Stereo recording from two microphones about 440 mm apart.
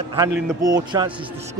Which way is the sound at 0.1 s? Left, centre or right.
Centre.